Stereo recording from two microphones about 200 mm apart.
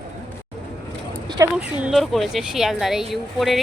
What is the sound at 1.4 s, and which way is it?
Speech, 15° right (ahead or behind).